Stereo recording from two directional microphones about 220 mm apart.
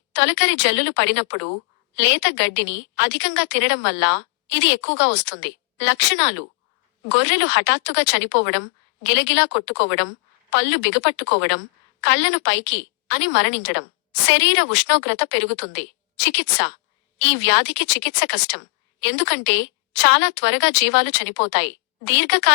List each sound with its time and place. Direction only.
0.1 s a woman's voice: 55° left (ahead or behind)